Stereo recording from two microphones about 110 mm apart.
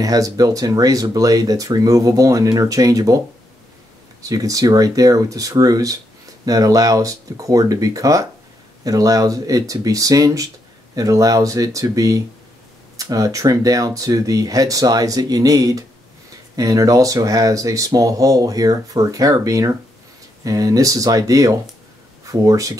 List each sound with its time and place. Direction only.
0.0 s speech: 30° right (ahead or behind)
4.2 s speech: 30° right (ahead or behind)